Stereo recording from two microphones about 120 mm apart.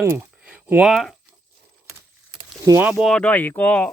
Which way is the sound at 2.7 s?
15° right (ahead or behind).